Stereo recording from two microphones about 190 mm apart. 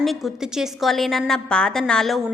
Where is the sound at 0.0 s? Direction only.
Centre (ahead or behind).